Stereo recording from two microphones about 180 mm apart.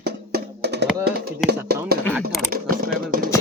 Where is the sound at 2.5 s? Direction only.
55° right (ahead or behind).